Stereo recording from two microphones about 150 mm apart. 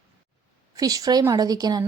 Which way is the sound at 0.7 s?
25° right (ahead or behind).